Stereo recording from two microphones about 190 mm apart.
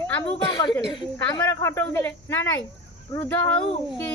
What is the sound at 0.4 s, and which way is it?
Speech, 25° left (ahead or behind).